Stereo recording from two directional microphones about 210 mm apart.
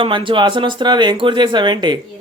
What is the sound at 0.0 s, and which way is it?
Speech, 25° right (ahead or behind).